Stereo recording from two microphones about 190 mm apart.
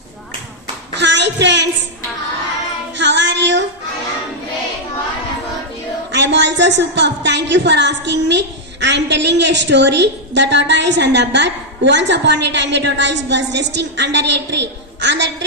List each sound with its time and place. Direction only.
0.9 s a sound: 65° right (ahead or behind)
3.0 s child singing: 70° right (ahead or behind)
6.1 s a woman's voice: 65° right (ahead or behind)